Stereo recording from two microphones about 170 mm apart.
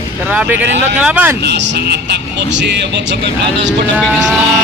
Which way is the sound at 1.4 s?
75° right (ahead or behind).